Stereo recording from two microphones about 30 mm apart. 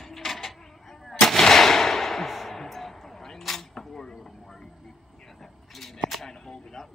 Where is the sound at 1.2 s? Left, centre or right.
Centre.